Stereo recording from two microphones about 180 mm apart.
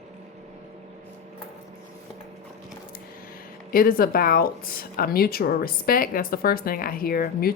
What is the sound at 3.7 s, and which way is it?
Speech, 55° left (ahead or behind).